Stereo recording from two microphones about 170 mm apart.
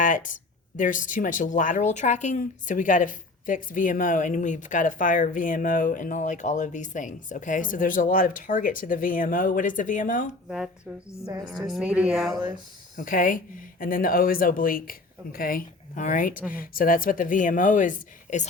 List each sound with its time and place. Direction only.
0.0 s a sound: 50° left (ahead or behind)
0.8 s speech: 50° left (ahead or behind)
11.4 s a woman's voice: centre (ahead or behind)
13.0 s speech: 50° left (ahead or behind)